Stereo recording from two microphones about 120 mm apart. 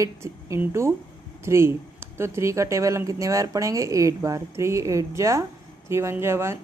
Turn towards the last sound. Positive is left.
turn(degrees=-20)  # may be behind; listen again after turning